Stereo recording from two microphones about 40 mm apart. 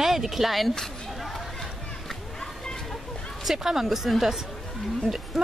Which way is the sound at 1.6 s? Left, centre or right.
Centre.